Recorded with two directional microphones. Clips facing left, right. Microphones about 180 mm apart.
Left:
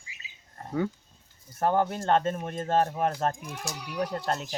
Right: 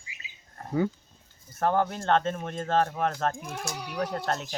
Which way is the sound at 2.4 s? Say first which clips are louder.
Even; 40° left (ahead or behind).